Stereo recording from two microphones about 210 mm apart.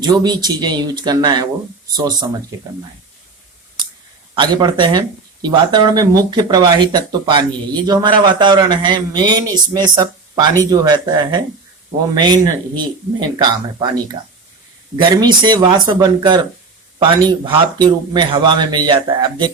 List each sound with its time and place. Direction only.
0.0 s speech: 20° right (ahead or behind)
4.4 s speech: 20° right (ahead or behind)
15.0 s speech: 20° right (ahead or behind)